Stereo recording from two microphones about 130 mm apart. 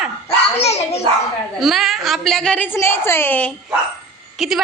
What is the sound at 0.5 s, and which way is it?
Speech, 55° left (ahead or behind).